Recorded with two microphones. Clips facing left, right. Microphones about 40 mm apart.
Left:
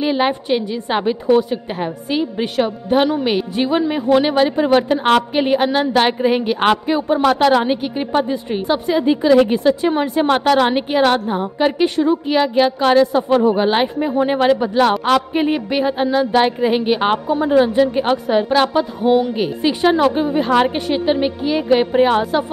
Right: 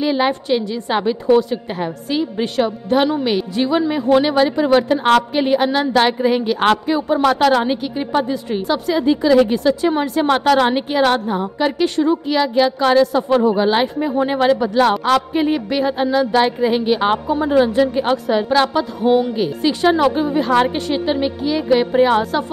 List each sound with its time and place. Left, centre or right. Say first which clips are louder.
0.0 s a woman's voice: even; left
7.2 s speech: left 1 dB; centre
8.1 s a woman's voice: even; left
13.9 s speech: left 1 dB; centre
17.3 s a woman's voice: left 2 dB; centre